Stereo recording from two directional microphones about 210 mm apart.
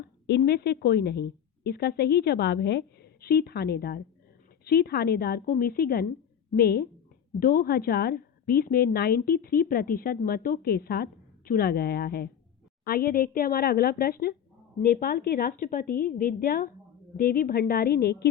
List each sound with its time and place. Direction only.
0.3 s a woman's voice: 50° left (ahead or behind)